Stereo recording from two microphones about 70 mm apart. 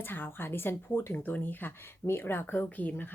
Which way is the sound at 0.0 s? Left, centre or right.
Left.